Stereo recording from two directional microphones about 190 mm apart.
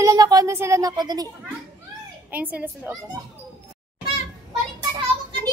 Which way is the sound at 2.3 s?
5° right (ahead or behind).